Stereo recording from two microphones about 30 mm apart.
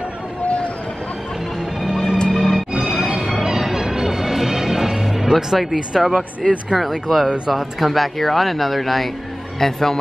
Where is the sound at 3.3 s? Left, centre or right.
Centre.